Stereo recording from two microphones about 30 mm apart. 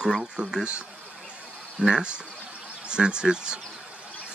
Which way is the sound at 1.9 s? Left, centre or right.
Right.